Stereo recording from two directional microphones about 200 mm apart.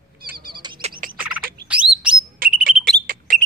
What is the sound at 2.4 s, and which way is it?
Bird, 45° right (ahead or behind).